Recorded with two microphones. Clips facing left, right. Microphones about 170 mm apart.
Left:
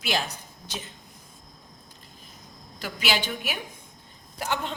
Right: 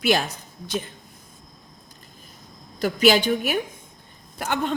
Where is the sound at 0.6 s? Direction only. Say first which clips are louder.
Right 10 dB; 50° right (ahead or behind).